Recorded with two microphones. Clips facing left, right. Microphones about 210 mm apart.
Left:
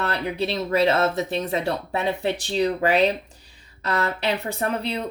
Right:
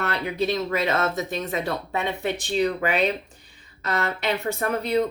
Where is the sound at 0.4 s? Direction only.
30° left (ahead or behind).